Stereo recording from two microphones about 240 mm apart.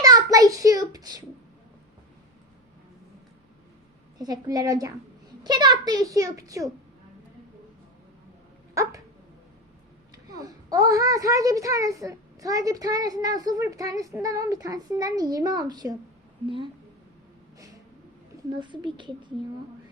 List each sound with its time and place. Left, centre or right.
0.0 s a child's voice: centre
4.2 s a child's voice: centre
8.7 s dog: centre
10.4 s a child's voice: centre
18.5 s speech: centre